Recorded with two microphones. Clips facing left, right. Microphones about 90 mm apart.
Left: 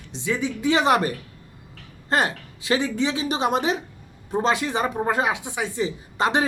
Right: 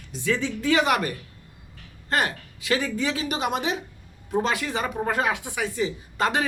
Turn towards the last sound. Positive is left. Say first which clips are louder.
# left 2 dB
turn(degrees=25)  # may be behind; listen again after turning